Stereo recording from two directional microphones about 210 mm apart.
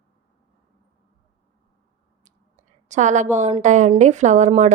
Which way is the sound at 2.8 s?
35° right (ahead or behind).